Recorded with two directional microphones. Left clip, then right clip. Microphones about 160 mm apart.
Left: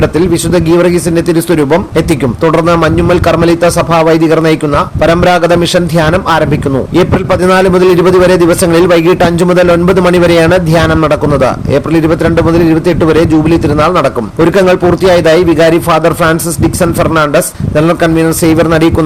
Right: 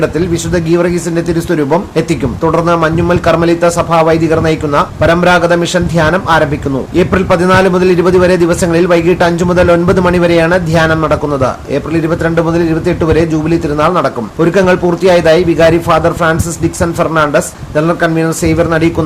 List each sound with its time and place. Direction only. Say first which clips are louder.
0.5 s a man's voice: left 3 dB; 45° left (ahead or behind)